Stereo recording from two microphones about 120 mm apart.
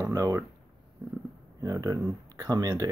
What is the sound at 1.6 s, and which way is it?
Speech, 30° right (ahead or behind).